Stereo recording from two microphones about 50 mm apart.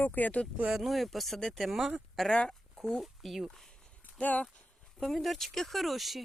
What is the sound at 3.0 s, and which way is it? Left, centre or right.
Speech, centre.